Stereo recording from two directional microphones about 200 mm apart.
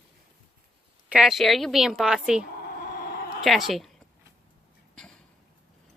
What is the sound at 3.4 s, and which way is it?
Speech, centre (ahead or behind).